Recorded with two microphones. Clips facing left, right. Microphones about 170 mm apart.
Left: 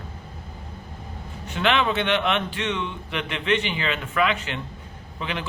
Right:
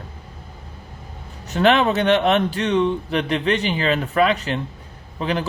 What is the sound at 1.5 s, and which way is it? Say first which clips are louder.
Speech: right 6 dB; 40° right (ahead or behind).